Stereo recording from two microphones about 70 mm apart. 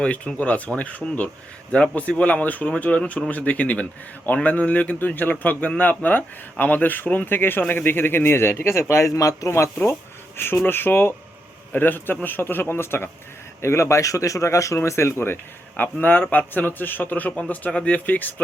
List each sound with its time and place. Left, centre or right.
0.3 s a man's voice: left
15.8 s a man's voice: left